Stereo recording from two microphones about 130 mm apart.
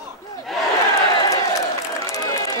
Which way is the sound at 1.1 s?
30° left (ahead or behind).